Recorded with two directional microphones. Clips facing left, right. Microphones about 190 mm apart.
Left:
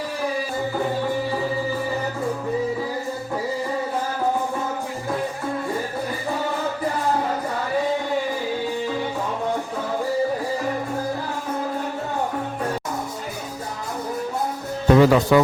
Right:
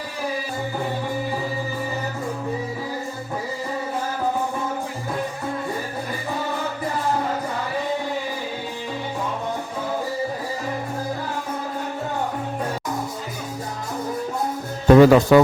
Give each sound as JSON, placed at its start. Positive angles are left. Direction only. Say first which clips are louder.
{"t": 14.8, "sound": "speech", "louder": "right 3 dB", "side_deg": -50}